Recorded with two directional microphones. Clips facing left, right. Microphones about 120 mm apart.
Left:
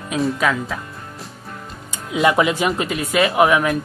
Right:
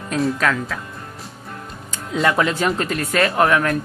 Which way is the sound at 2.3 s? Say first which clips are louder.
Left 1 dB; 15° left (ahead or behind).